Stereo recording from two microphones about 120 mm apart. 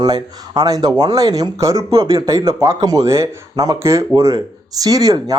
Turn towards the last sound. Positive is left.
turn(degrees=-30)  # may be behind; listen again after turning